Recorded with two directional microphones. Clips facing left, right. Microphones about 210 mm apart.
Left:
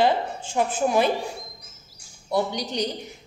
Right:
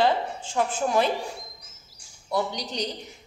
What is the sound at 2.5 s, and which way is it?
Speech, 55° left (ahead or behind).